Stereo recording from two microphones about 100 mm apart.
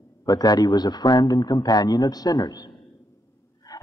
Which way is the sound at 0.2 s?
40° left (ahead or behind).